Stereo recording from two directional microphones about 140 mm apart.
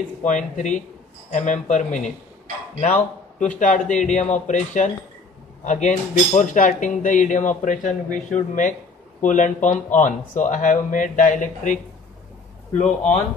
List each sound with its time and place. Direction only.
0.3 s speech: 60° left (ahead or behind)